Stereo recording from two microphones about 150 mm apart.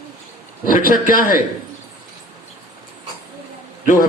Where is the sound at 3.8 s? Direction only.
60° left (ahead or behind).